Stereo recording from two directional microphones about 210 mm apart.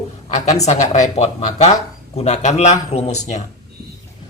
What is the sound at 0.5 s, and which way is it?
Speech, 30° left (ahead or behind).